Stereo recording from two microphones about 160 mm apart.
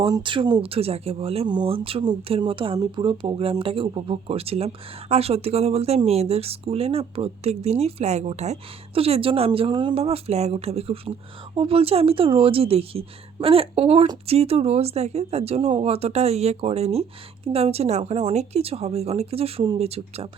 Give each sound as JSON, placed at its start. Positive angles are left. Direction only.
{"t": 0.1, "sound": "speech", "side_deg": -30}